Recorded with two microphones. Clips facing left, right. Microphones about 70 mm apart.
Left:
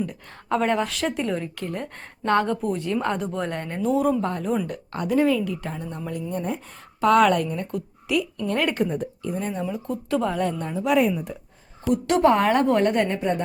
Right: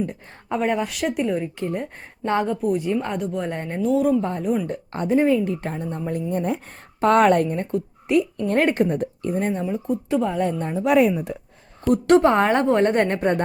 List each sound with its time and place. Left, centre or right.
0.5 s speech: centre
1.5 s speech: right; by 3.5 s centre
3.5 s a woman's voice: centre
3.8 s speech: centre
4.2 s speech: centre
4.6 s a woman's voice: right
5.6 s a woman's voice: right
8.9 s speech: right
9.6 s a woman's voice: right
10.8 s speech: right
11.9 s a woman's voice: right